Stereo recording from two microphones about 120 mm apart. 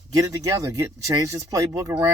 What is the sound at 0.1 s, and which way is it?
Speech, 30° right (ahead or behind).